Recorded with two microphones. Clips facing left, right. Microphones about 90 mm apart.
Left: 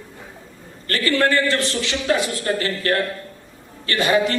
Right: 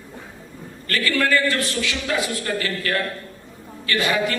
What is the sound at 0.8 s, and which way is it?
A man's voice, 30° left (ahead or behind).